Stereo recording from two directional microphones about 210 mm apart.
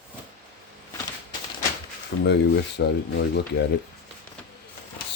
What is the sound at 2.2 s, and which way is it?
Speech, 55° left (ahead or behind).